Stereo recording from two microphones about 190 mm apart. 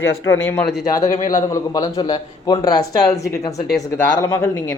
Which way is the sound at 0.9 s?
20° left (ahead or behind).